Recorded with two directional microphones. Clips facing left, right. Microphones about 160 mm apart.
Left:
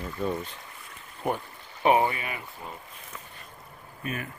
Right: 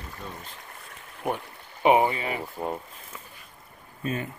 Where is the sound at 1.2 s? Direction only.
5° right (ahead or behind).